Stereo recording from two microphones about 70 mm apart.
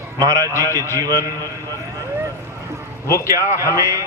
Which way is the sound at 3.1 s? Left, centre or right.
Left.